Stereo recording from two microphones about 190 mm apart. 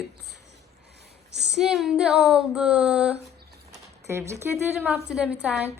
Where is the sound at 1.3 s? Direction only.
60° right (ahead or behind).